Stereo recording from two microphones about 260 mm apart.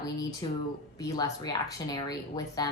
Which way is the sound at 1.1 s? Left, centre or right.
Centre.